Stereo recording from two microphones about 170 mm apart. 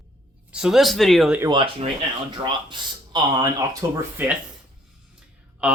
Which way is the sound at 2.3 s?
25° right (ahead or behind).